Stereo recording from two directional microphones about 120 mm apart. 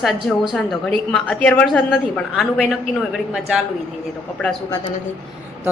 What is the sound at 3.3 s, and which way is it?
Speech, 10° right (ahead or behind).